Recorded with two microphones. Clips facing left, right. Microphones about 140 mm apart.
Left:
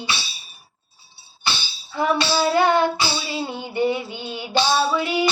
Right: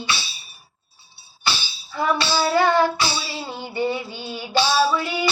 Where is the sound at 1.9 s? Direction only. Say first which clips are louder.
Left 1 dB; 20° left (ahead or behind).